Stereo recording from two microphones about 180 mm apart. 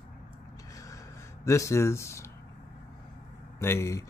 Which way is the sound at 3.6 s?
15° left (ahead or behind).